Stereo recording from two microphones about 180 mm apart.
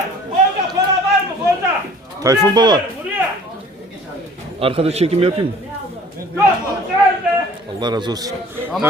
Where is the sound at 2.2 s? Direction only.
20° right (ahead or behind).